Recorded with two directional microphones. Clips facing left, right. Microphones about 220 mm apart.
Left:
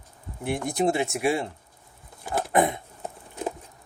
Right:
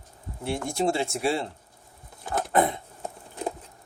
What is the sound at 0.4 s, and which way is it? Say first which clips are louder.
Speech: left 2 dB; 15° left (ahead or behind).